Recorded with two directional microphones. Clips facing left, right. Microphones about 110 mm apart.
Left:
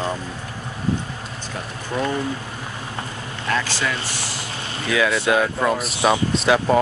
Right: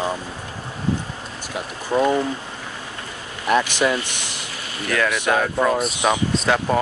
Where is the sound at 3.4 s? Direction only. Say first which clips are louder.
Right 5 dB; 20° right (ahead or behind).